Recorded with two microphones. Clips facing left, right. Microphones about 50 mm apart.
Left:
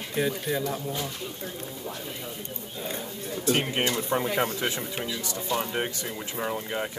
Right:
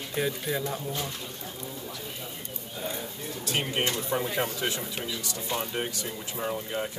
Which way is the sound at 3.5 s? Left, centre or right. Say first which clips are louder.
Left 3 dB; centre.